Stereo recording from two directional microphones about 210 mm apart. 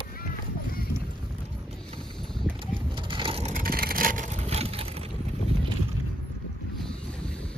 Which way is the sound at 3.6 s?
45° right (ahead or behind).